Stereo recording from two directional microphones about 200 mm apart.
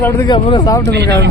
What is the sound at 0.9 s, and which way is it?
Speech, 55° right (ahead or behind).